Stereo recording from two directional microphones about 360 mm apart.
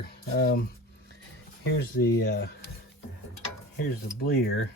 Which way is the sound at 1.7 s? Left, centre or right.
Left.